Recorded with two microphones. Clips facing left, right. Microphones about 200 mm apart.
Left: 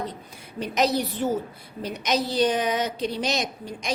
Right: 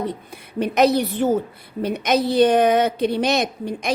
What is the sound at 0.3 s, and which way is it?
A woman's voice, 60° right (ahead or behind).